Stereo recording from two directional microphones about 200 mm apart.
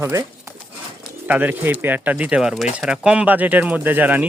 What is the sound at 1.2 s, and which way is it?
Speech, 10° right (ahead or behind).